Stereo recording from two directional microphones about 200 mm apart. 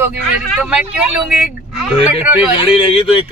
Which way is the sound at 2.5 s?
30° left (ahead or behind).